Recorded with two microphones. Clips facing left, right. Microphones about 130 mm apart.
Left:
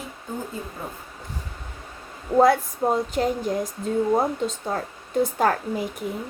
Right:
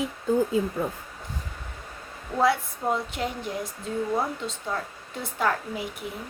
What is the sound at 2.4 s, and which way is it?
Speech, 40° left (ahead or behind).